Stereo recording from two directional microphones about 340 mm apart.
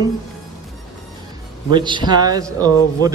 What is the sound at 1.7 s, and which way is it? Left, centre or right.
A man's voice, centre.